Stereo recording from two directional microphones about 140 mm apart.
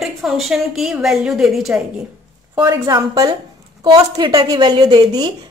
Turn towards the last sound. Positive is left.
turn(degrees=-30)  # may be behind; listen again after turning